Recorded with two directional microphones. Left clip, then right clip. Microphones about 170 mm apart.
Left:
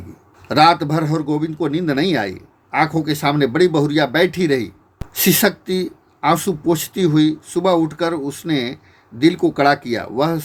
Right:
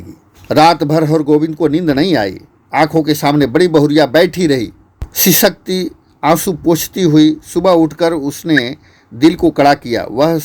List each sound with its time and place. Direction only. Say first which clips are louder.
0.4 s a man's voice: right 4 dB; 45° right (ahead or behind)